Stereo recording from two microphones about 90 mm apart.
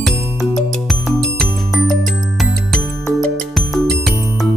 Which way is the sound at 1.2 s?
5° left (ahead or behind).